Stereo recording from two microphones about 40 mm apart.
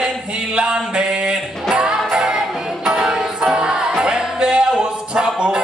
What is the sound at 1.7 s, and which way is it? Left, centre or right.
Music, centre.